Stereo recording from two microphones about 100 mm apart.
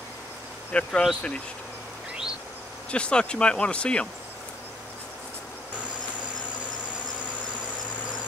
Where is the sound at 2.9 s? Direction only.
10° left (ahead or behind).